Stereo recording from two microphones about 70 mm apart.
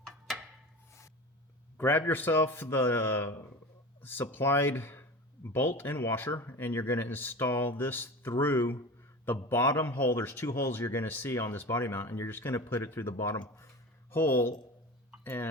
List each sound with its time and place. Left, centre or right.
1.8 s speech: left
11.3 s speech: left